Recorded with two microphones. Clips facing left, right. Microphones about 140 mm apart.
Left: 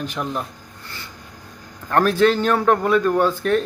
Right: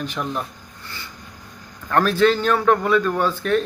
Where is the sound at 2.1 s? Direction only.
45° left (ahead or behind).